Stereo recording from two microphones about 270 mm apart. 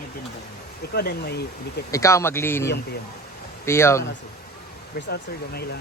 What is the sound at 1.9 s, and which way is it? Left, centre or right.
Speech, centre.